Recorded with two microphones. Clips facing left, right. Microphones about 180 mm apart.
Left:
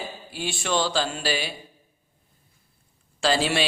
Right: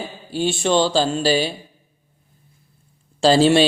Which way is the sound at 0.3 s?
30° right (ahead or behind).